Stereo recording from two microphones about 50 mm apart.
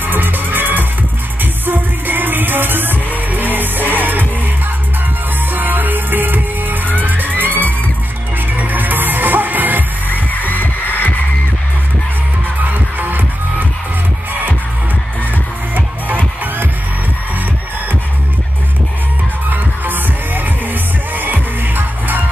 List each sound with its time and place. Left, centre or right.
0.0 s music: right
5.5 s music: right
10.4 s music: left
12.6 s music: right
15.7 s music: right
19.5 s music: right